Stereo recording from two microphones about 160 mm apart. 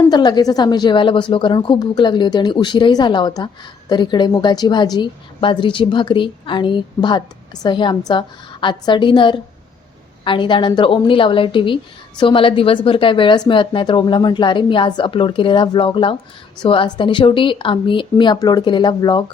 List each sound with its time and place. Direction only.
0.0 s a woman's voice: 25° left (ahead or behind)